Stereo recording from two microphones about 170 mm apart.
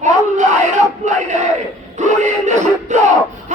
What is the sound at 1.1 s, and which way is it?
Crowd, 45° right (ahead or behind).